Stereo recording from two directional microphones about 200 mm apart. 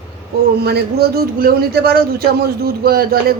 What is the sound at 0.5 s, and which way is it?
A man's voice, 50° right (ahead or behind).